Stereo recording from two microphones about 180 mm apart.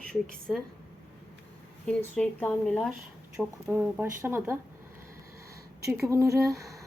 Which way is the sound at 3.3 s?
10° right (ahead or behind).